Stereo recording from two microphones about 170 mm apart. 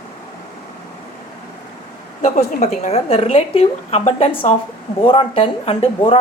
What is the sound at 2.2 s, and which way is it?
A woman's voice, 45° left (ahead or behind).